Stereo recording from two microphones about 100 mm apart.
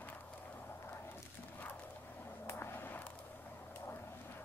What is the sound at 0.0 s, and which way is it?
Dog, 15° left (ahead or behind).